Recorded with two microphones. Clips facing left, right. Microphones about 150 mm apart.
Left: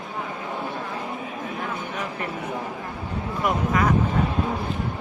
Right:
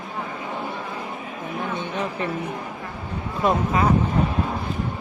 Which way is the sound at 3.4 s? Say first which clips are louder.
Right 2 dB; 30° right (ahead or behind).